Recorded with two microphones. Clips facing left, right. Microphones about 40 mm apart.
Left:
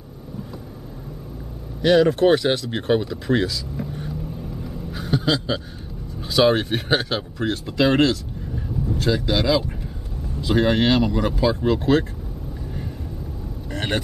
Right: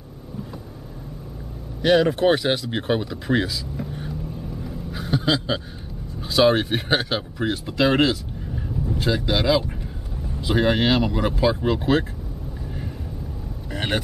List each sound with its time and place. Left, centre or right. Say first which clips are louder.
1.8 s speech: left 2 dB; centre
4.6 s a sound: left 1 dB; centre
6.2 s speech: even; centre
13.7 s speech: even; centre